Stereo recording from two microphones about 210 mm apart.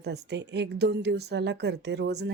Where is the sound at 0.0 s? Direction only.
55° right (ahead or behind).